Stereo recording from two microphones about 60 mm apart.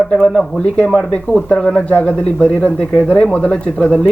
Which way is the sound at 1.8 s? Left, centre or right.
Left.